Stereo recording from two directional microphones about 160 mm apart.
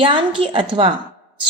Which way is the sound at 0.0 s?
30° right (ahead or behind).